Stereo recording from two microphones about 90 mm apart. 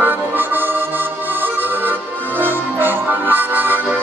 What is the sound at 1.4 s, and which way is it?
Music, 20° right (ahead or behind).